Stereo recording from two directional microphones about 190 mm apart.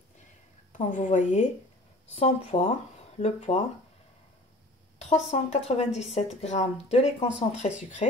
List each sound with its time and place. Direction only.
0.7 s speech: 40° left (ahead or behind)
5.0 s speech: 35° left (ahead or behind)